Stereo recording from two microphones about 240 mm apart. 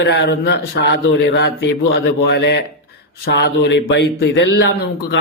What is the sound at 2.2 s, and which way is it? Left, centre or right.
Speech, left.